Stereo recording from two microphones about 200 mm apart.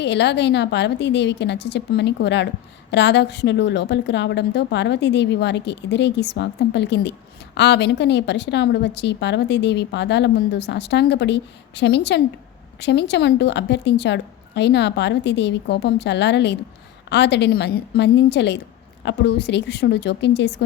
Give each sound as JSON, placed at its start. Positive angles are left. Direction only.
{"t": 0.0, "sound": "a woman's voice", "side_deg": 60}